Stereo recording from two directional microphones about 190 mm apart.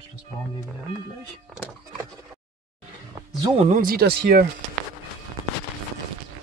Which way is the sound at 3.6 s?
45° right (ahead or behind).